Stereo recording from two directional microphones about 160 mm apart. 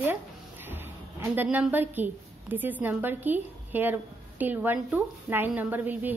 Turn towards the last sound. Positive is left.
turn(degrees=-10)  # may be behind; listen again after turning